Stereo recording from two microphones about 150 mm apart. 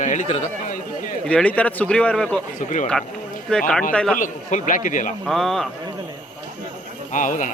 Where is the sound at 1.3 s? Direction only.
10° left (ahead or behind).